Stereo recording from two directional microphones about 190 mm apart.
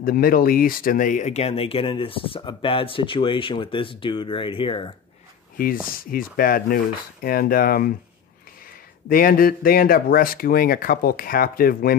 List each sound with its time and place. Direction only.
0.0 s speech: 50° left (ahead or behind); by 4.9 s 25° left (ahead or behind)
5.9 s speech: 50° left (ahead or behind)
9.1 s speech: 50° left (ahead or behind)